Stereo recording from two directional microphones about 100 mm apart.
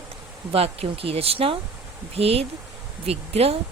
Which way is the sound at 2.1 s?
90° right.